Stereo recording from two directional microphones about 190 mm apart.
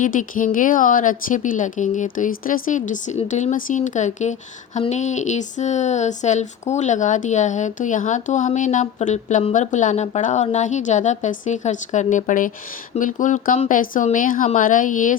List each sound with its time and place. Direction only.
0.0 s speech: 45° left (ahead or behind)